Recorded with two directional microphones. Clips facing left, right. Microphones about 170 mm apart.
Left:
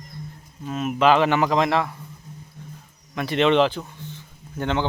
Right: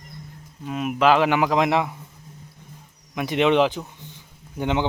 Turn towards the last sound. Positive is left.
turn(degrees=-15)  # may be behind; listen again after turning